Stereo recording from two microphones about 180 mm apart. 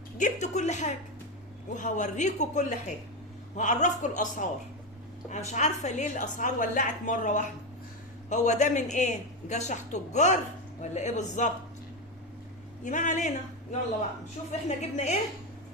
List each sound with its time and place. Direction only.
0.2 s a woman's voice: 40° left (ahead or behind)
12.8 s a man's voice: 45° left (ahead or behind)